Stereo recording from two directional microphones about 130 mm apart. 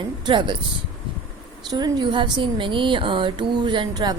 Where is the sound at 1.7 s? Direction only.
30° right (ahead or behind).